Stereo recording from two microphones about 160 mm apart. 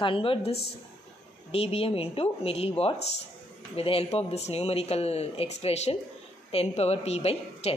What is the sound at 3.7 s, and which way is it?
Speech, 35° left (ahead or behind).